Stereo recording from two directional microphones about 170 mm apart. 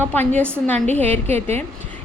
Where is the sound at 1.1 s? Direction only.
40° right (ahead or behind).